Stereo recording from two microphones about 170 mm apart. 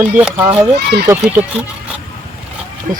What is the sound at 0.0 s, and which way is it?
Speech, 10° right (ahead or behind).